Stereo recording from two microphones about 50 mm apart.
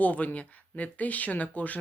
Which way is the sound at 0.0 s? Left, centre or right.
Left.